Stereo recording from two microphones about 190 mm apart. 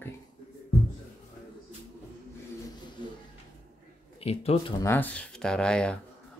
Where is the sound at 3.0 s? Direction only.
25° left (ahead or behind).